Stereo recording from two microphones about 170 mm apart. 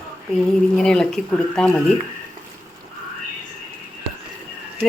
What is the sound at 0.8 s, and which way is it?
Speech, 5° left (ahead or behind).